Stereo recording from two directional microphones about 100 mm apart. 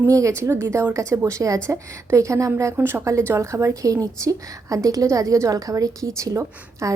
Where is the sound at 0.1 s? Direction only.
30° right (ahead or behind).